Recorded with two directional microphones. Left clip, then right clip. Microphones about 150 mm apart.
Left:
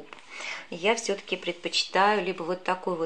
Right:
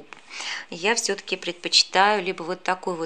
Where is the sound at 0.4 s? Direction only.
30° right (ahead or behind).